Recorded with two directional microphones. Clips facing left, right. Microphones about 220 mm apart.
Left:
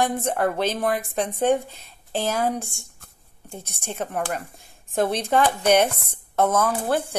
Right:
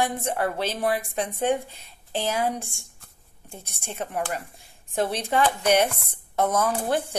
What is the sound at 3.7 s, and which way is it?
Speech, 45° left (ahead or behind).